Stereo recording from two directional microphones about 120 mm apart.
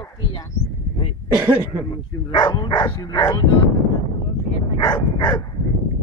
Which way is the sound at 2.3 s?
40° left (ahead or behind).